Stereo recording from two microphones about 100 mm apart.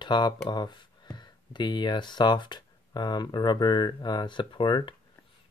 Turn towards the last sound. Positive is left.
turn(degrees=55)  # may be behind; listen again after turning